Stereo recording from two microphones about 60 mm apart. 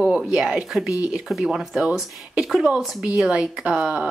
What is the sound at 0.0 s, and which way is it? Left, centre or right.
Speech, centre.